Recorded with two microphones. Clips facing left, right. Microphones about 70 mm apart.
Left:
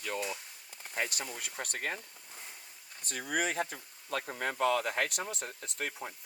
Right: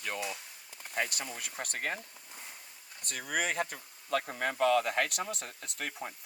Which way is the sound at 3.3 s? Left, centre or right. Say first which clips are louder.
Even; right.